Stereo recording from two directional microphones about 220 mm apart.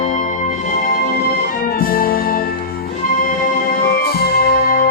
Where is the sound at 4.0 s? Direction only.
45° left (ahead or behind).